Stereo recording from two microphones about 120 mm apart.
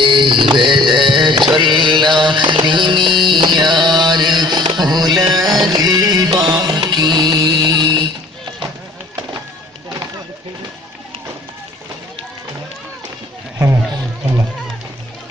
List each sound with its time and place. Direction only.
0.0 s music: 40° right (ahead or behind)